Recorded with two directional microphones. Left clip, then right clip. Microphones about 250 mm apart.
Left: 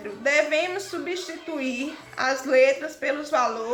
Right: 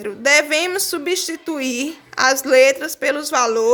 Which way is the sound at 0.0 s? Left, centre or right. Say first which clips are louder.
Right 7 dB; right.